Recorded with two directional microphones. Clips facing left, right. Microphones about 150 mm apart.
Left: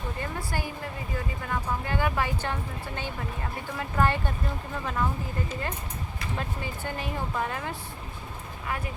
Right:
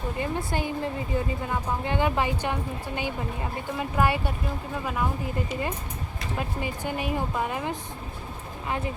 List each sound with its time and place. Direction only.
0.2 s speech: 20° right (ahead or behind)
5.5 s speech: 10° right (ahead or behind)